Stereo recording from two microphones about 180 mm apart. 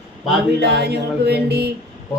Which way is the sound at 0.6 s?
65° right (ahead or behind).